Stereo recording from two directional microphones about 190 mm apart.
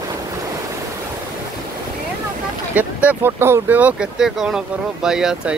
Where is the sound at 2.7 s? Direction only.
10° right (ahead or behind).